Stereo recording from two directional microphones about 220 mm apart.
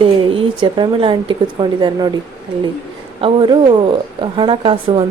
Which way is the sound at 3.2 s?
20° right (ahead or behind).